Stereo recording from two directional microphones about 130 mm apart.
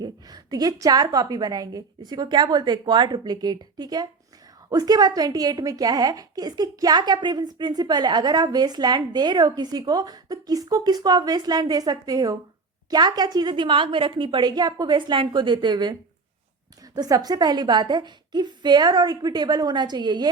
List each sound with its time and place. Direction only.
0.0 s a woman's voice: 30° right (ahead or behind)